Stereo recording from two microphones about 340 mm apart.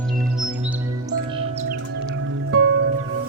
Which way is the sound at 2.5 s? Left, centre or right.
Right.